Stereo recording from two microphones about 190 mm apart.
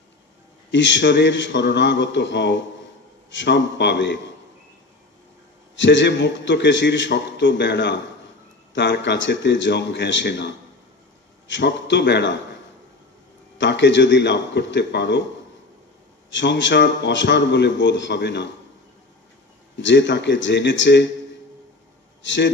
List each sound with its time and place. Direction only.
0.7 s a man's voice: 75° left (ahead or behind)
5.8 s a man's voice: 70° left (ahead or behind)
13.6 s a man's voice: 70° left (ahead or behind)
16.3 s a man's voice: 75° left (ahead or behind)
19.8 s a man's voice: 70° left (ahead or behind)
22.2 s a man's voice: 70° left (ahead or behind)